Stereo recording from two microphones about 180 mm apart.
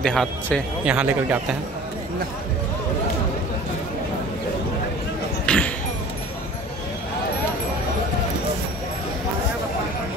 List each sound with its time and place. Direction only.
0.0 s speech: 5° left (ahead or behind)
0.8 s speech: 10° right (ahead or behind)
5.5 s a sound: 5° left (ahead or behind)